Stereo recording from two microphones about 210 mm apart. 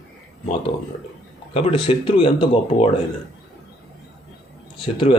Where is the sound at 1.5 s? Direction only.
25° left (ahead or behind).